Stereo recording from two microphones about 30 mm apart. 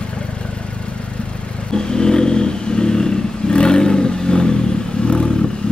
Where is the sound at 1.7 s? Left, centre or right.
Left.